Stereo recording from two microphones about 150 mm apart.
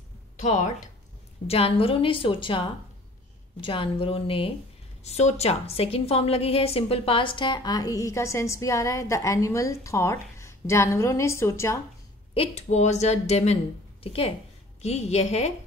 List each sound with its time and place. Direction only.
0.4 s a woman's voice: 50° left (ahead or behind)
1.5 s a woman's voice: 40° left (ahead or behind); by 11.8 s 20° left (ahead or behind)
12.4 s a woman's voice: 50° left (ahead or behind)